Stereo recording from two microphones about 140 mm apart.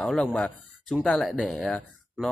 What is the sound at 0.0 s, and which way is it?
Speech, 5° left (ahead or behind).